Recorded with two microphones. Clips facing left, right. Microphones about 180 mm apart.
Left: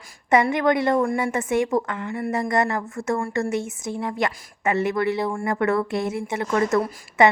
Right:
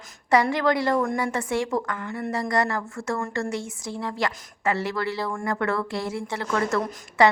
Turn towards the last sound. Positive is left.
turn(degrees=20)  # may be behind; listen again after turning